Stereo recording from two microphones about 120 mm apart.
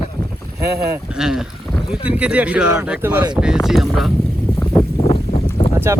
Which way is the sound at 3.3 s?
5° right (ahead or behind).